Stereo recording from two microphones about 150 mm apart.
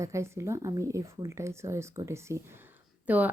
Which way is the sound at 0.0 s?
20° right (ahead or behind).